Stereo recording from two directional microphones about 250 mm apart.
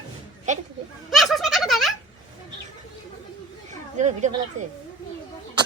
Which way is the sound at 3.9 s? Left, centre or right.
Right.